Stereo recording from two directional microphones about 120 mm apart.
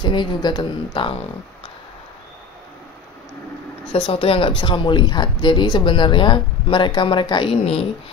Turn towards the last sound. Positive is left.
turn(degrees=45)  # may be behind; listen again after turning